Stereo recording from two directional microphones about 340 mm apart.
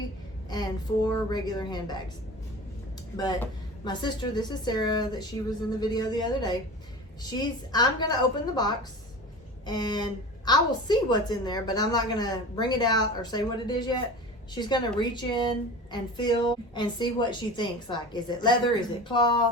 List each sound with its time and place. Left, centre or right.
0.5 s speech: centre
3.2 s speech: centre